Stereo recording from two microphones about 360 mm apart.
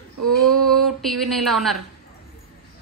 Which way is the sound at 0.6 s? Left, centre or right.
Centre.